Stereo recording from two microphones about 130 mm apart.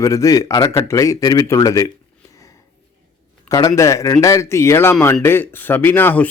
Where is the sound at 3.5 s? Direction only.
25° left (ahead or behind).